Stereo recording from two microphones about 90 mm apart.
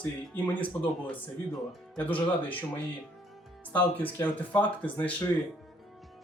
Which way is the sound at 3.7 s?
20° left (ahead or behind).